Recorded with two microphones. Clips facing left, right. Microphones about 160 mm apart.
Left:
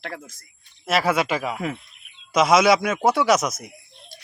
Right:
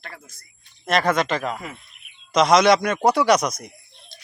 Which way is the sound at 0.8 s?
5° left (ahead or behind).